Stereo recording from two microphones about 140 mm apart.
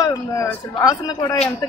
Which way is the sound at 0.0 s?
25° left (ahead or behind).